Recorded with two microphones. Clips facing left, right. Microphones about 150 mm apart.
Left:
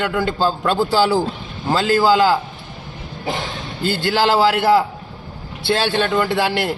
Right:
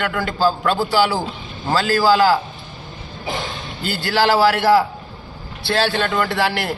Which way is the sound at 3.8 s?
20° left (ahead or behind).